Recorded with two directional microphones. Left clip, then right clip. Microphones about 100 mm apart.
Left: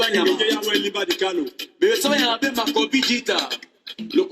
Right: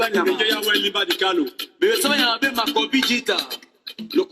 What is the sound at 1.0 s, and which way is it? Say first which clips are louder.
Music: right 2 dB; 35° left (ahead or behind).